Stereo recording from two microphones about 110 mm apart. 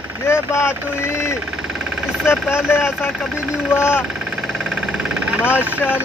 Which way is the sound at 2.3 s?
20° left (ahead or behind).